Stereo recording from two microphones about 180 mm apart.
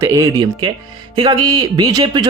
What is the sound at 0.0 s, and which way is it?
Speech, 15° right (ahead or behind).